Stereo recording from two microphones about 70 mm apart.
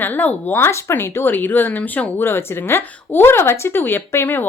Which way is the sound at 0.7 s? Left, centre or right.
Left.